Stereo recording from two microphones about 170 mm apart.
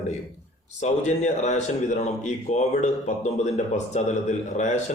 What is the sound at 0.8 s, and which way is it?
Speech, 45° left (ahead or behind).